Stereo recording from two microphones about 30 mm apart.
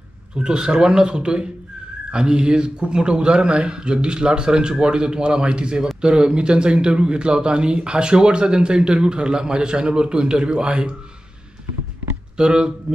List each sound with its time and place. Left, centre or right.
0.4 s a man's voice: right
12.4 s speech: right